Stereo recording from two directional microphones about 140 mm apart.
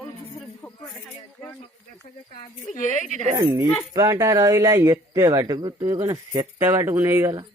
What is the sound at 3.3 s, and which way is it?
Speech, 25° right (ahead or behind).